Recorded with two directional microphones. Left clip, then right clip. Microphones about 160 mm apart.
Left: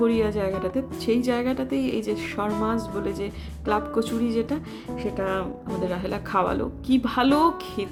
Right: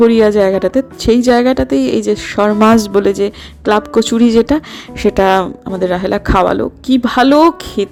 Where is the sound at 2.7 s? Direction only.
65° right (ahead or behind).